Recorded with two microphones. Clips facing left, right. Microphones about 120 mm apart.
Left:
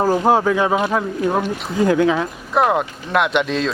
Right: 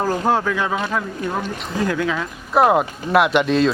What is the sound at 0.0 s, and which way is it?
Speech, 15° left (ahead or behind).